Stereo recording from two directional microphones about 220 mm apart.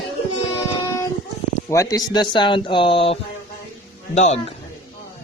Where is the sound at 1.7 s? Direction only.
15° left (ahead or behind); by 4.4 s 30° left (ahead or behind).